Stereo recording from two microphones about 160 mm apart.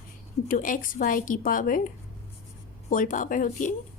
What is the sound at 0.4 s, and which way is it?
A woman's voice, 55° left (ahead or behind).